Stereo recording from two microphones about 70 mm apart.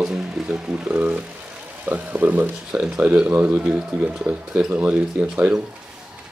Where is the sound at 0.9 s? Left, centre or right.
Right.